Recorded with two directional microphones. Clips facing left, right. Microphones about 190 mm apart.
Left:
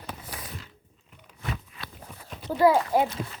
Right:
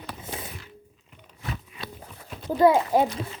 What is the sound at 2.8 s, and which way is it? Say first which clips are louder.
Speech: right 2 dB; 20° right (ahead or behind).